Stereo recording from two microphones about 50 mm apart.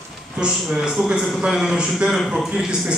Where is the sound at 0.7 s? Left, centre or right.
Centre.